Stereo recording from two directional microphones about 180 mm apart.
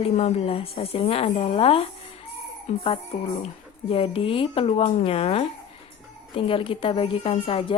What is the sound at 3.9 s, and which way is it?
A woman's voice, 30° left (ahead or behind).